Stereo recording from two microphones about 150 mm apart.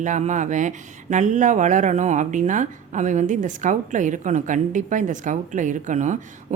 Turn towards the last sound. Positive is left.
turn(degrees=-55)  # may be behind; listen again after turning